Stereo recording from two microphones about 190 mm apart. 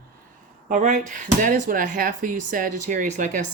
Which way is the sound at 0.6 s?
45° right (ahead or behind).